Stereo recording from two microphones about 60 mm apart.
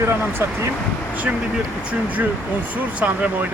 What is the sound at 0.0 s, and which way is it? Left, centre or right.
Speech, right.